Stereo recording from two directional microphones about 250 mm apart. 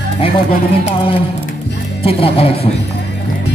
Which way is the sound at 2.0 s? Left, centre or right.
Left.